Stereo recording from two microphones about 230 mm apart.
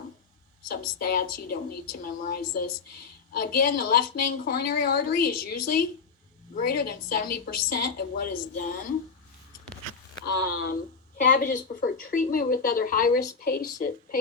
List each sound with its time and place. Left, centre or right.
0.7 s a woman's voice: left
10.2 s a woman's voice: left